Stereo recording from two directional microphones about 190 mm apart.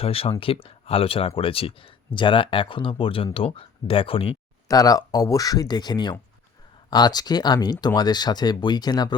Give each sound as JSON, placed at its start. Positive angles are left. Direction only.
{"t": 0.0, "sound": "speech", "side_deg": 30}